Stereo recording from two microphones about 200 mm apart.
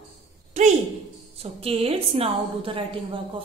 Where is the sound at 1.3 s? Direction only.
30° right (ahead or behind).